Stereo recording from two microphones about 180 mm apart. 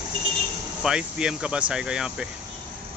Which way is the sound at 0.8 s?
5° right (ahead or behind).